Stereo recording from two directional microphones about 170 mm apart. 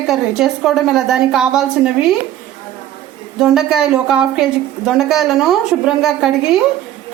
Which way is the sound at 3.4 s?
5° right (ahead or behind).